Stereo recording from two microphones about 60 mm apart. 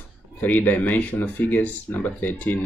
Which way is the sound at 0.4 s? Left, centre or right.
Left.